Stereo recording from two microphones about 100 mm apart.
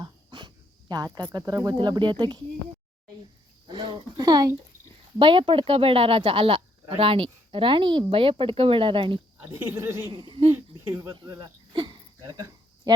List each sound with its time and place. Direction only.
0.0 s speech: 50° right (ahead or behind)
3.7 s a sound: 50° right (ahead or behind)
5.2 s speech: 60° right (ahead or behind)
9.4 s speech: 25° right (ahead or behind)
10.1 s speech: 55° right (ahead or behind)
10.8 s speech: 25° right (ahead or behind)
11.3 s a sound: 50° right (ahead or behind)